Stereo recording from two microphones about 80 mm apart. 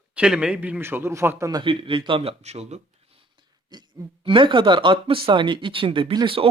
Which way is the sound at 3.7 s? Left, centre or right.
Right.